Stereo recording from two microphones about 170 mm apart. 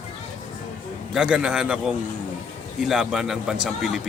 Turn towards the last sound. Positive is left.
turn(degrees=-5)  # may be behind; listen again after turning